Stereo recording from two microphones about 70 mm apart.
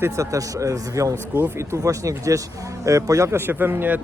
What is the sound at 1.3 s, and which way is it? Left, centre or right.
A man's voice, right.